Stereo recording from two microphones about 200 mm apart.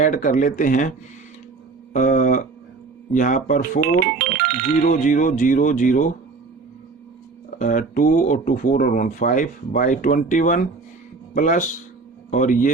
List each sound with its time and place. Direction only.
0.0 s speech: 40° left (ahead or behind)
4.2 s ringtone: 50° right (ahead or behind)
4.9 s speech: 40° left (ahead or behind)
7.6 s speech: 40° left (ahead or behind)